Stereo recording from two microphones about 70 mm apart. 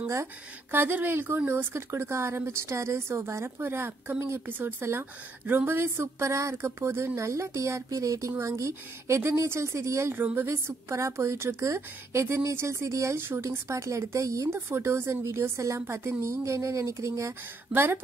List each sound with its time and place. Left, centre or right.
0.7 s a woman's voice: right
10.1 s speech: right
10.5 s a woman's voice: right
14.5 s a woman's voice: right
17.7 s speech: right